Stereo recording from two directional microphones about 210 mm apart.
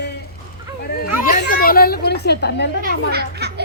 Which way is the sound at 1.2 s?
45° left (ahead or behind).